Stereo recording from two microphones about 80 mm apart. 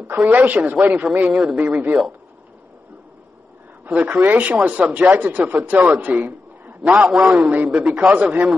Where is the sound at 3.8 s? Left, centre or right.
Right.